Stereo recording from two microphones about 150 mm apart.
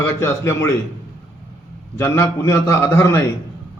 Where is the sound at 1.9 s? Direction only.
15° left (ahead or behind).